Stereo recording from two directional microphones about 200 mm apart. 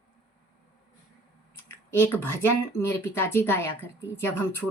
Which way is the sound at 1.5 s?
10° left (ahead or behind).